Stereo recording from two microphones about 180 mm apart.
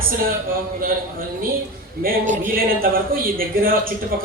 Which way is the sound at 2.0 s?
45° right (ahead or behind).